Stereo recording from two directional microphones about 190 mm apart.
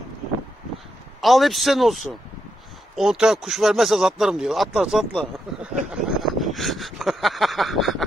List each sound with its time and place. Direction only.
1.2 s speech: centre (ahead or behind)